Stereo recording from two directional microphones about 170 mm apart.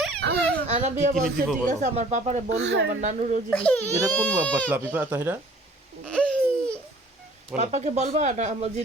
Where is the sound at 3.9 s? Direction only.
20° right (ahead or behind).